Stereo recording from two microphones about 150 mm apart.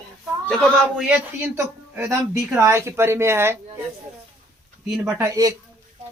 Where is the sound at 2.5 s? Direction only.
20° right (ahead or behind).